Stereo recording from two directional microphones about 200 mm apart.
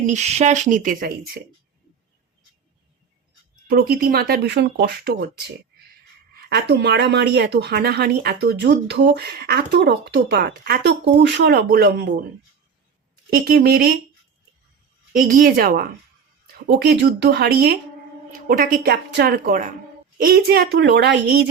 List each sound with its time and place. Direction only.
0.0 s speech: 35° right (ahead or behind)
3.5 s speech: 50° right (ahead or behind)
6.3 s speech: 55° right (ahead or behind)
13.3 s speech: 50° right (ahead or behind)
15.1 s speech: 45° right (ahead or behind)
16.6 s speech: 60° right (ahead or behind)